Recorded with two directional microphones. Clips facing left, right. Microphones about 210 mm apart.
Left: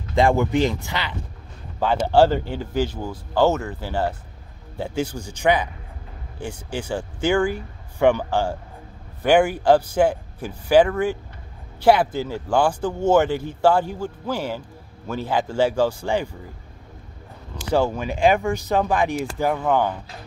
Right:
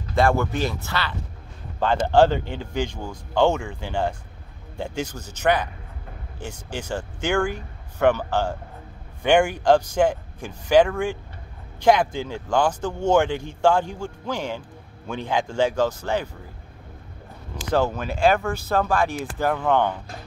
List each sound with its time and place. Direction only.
0.1 s speech: 15° left (ahead or behind)
6.7 s speech: 10° left (ahead or behind)
17.6 s speech: 10° left (ahead or behind)